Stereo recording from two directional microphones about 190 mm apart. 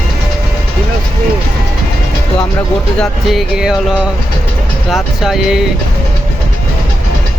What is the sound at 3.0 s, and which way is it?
Speech, centre (ahead or behind).